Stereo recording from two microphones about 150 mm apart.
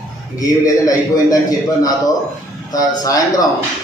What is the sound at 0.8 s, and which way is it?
A man's voice, 25° left (ahead or behind).